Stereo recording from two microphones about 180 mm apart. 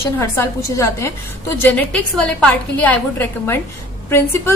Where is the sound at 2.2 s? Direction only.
5° left (ahead or behind).